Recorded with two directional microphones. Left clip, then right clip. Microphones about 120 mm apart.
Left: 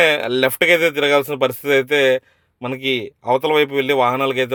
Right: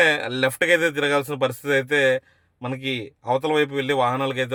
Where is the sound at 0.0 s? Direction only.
30° left (ahead or behind).